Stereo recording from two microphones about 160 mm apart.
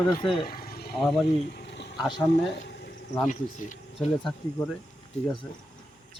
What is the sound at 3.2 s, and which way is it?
Speech, 50° left (ahead or behind).